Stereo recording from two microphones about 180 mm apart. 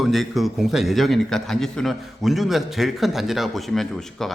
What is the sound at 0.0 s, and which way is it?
A man's voice, centre (ahead or behind).